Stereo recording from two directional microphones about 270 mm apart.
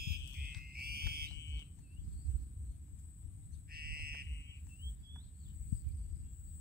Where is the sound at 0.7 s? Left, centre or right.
Right.